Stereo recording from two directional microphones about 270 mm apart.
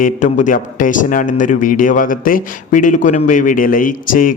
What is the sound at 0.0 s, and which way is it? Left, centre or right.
A man's voice, left.